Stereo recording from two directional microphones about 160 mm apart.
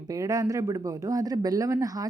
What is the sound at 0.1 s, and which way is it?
A woman's voice, 20° right (ahead or behind).